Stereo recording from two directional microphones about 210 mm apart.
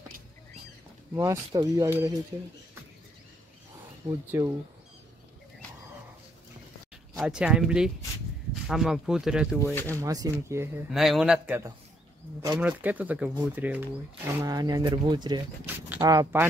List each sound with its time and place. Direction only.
1.1 s speech: 15° right (ahead or behind)
4.0 s speech: 15° right (ahead or behind)
7.2 s speech: 5° right (ahead or behind)
9.9 s speech: 15° right (ahead or behind)